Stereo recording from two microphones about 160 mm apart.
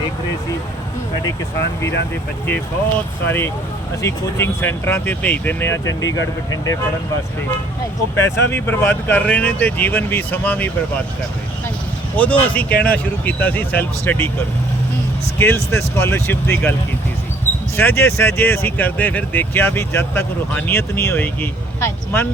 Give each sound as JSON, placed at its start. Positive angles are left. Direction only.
{"t": 3.2, "sound": "speech", "side_deg": 15}
{"t": 8.1, "sound": "speech", "side_deg": 15}
{"t": 12.1, "sound": "speech", "side_deg": 10}
{"t": 15.4, "sound": "speech", "side_deg": 15}
{"t": 17.7, "sound": "speech", "side_deg": 15}